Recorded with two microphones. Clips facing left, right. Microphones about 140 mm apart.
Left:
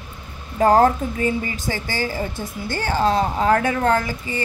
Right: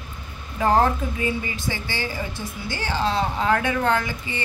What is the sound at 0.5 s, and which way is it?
A woman's voice, 40° left (ahead or behind).